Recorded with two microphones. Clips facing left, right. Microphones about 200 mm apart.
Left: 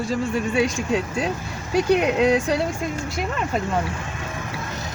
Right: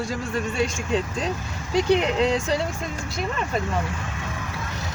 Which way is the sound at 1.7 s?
10° left (ahead or behind).